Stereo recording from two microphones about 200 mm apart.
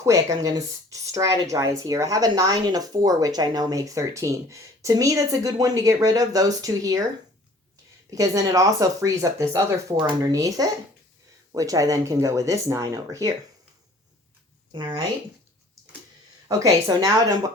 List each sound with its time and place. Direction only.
0.0 s speech: 15° right (ahead or behind)
8.1 s speech: 15° right (ahead or behind)
16.5 s speech: 15° right (ahead or behind)